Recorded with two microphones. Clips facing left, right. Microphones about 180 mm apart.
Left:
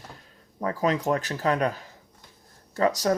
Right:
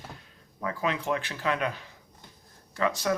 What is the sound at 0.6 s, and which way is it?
Speech, 40° left (ahead or behind).